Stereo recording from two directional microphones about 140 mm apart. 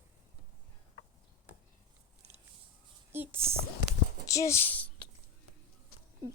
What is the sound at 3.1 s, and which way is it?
Speech, 15° right (ahead or behind).